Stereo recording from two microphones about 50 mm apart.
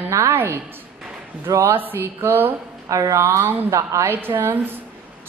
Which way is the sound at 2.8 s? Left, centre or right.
Right.